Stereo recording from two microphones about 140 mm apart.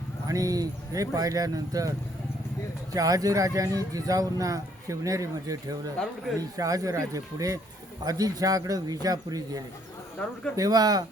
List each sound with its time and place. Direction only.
0.3 s speech: 25° right (ahead or behind)
2.9 s speech: 25° right (ahead or behind)